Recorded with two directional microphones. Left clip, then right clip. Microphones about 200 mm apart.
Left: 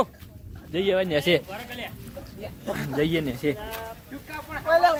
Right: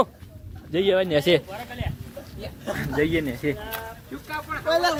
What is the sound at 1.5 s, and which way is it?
Speech, 65° left (ahead or behind).